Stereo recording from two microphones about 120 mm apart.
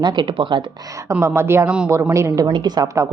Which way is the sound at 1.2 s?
20° right (ahead or behind).